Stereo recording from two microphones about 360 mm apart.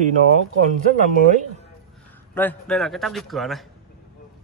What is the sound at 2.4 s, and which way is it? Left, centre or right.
Speech, centre.